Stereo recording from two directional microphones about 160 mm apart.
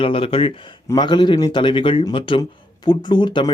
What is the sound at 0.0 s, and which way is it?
A man's voice, 35° left (ahead or behind).